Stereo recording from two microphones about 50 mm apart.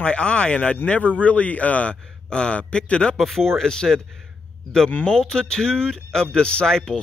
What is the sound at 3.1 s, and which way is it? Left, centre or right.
Speech, centre.